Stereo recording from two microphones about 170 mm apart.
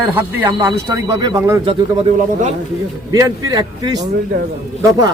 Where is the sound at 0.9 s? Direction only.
20° right (ahead or behind).